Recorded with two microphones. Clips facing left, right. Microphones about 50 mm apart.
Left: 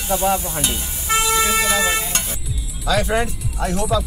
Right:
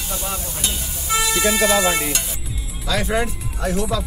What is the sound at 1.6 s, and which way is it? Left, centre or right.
Speech, right.